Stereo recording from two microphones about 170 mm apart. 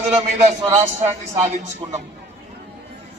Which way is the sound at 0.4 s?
40° right (ahead or behind).